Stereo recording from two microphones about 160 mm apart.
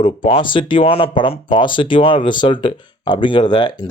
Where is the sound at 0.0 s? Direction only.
35° left (ahead or behind).